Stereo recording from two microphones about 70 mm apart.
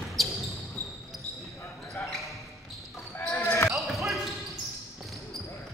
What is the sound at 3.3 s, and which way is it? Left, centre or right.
Basketball bounce, left.